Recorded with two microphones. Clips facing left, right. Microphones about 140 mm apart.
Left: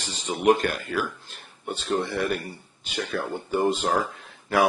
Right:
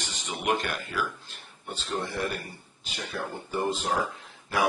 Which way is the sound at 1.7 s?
55° left (ahead or behind).